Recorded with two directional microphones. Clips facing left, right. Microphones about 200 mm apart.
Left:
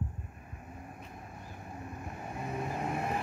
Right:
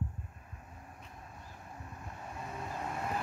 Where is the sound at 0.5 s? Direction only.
15° left (ahead or behind).